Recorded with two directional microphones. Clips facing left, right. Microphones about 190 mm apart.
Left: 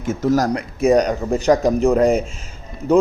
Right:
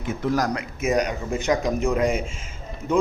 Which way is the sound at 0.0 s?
45° left (ahead or behind).